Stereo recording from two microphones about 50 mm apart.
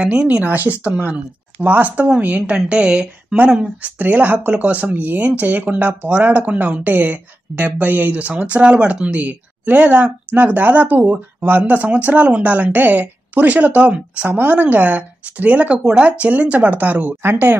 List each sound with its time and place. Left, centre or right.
0.0 s speech: right
1.6 s speech: right
3.8 s speech: right
17.2 s speech: right